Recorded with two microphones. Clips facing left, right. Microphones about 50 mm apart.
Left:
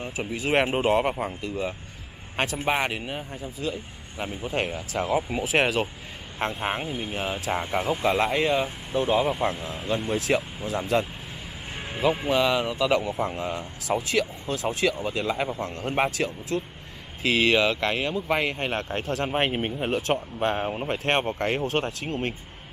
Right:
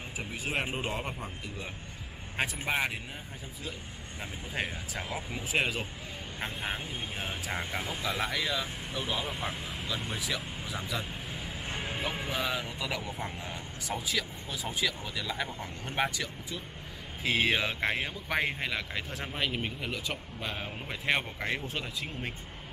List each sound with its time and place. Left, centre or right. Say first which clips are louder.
0.3 s speech: left 10 dB; left
4.2 s speech: left 8 dB; left
8.0 s speech: left 9 dB; left
11.7 s music: left 1 dB; centre
12.3 s speech: left 10 dB; left